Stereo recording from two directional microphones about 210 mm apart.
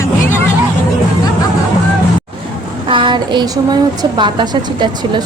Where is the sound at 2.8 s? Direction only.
25° right (ahead or behind).